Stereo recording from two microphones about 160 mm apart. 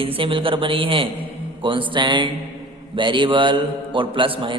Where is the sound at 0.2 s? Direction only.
35° right (ahead or behind).